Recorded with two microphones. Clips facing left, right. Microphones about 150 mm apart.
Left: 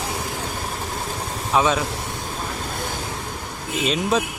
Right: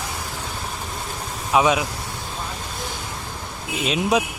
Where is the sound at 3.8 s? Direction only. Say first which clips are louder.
Right 1 dB; 5° right (ahead or behind).